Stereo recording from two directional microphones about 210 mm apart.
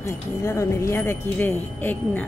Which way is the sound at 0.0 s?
15° left (ahead or behind).